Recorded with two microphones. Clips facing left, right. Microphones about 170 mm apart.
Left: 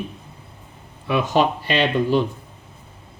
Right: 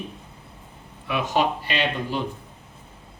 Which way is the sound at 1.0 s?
35° left (ahead or behind).